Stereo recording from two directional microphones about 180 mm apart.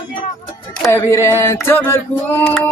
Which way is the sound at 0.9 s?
15° left (ahead or behind).